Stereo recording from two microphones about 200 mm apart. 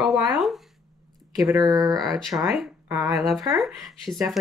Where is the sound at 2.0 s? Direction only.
Centre (ahead or behind).